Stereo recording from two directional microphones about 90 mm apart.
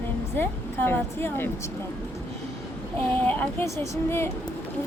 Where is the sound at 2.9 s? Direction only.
20° left (ahead or behind).